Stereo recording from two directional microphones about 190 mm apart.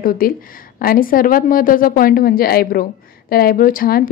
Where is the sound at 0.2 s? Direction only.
50° left (ahead or behind).